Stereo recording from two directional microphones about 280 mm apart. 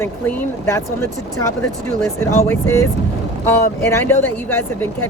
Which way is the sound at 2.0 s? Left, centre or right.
Centre.